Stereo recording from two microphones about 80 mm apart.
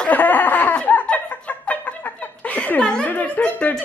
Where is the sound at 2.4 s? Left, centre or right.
Centre.